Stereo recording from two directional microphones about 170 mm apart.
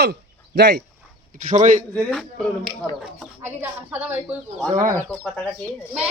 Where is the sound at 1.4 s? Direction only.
50° right (ahead or behind).